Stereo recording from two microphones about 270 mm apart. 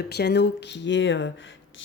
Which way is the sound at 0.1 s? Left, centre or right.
Left.